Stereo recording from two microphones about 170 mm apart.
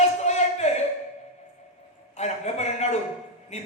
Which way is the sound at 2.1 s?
40° left (ahead or behind).